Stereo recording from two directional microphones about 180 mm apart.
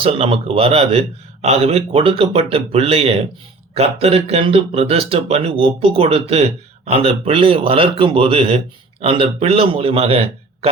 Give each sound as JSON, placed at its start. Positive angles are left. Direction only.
{"t": 0.0, "sound": "speech", "side_deg": -30}